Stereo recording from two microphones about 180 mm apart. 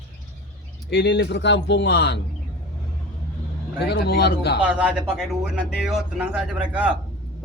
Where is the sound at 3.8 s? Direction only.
65° left (ahead or behind).